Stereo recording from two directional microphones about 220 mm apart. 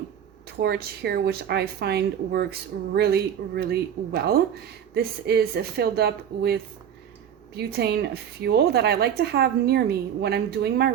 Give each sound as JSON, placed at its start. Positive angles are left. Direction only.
{"t": 0.4, "sound": "speech", "side_deg": -45}